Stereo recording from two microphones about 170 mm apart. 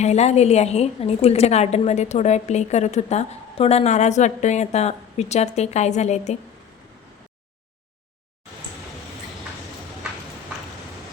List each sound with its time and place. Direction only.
0.0 s a woman's voice: 40° left (ahead or behind)